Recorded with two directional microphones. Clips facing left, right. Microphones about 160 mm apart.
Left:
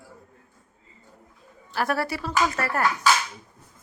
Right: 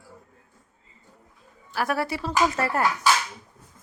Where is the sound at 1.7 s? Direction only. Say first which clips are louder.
Even; 10° right (ahead or behind).